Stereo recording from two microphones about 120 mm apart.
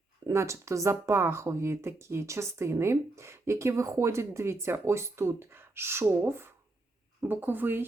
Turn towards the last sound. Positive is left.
turn(degrees=-15)  # may be behind; listen again after turning